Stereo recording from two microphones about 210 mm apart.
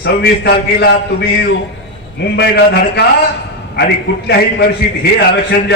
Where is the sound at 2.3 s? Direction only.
55° left (ahead or behind).